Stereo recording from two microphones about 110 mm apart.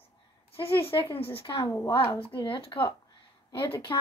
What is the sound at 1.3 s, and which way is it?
Speech, 50° left (ahead or behind).